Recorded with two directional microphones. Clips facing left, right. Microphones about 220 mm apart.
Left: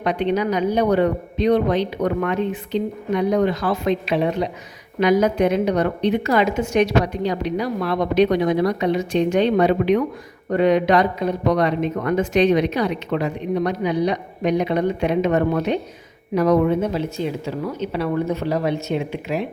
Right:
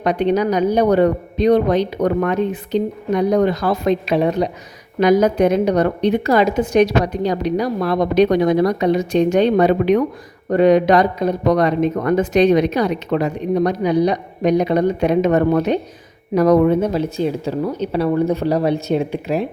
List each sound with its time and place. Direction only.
0.0 s speech: 40° right (ahead or behind)